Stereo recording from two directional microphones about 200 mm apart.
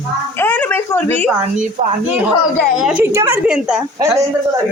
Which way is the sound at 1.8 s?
35° right (ahead or behind).